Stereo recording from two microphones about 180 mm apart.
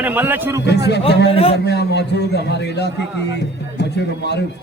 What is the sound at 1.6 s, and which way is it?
A man's voice, 70° left (ahead or behind).